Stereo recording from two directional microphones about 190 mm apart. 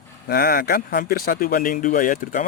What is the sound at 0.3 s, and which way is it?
Speech, 55° left (ahead or behind).